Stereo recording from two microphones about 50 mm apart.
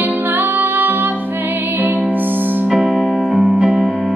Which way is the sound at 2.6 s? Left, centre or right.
Centre.